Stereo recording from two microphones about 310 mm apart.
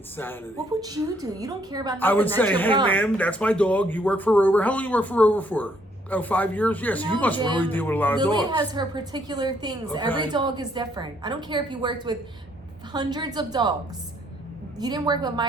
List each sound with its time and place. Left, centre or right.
0.8 s a woman's voice: centre
2.0 s speech: centre
7.3 s a woman's voice: centre
7.6 s speech: centre
8.2 s a woman's voice: centre
14.8 s a woman's voice: centre